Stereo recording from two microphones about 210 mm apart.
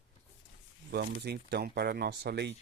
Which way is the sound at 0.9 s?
50° right (ahead or behind).